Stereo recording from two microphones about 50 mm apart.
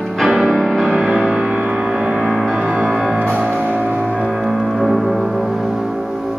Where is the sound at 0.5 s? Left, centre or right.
Centre.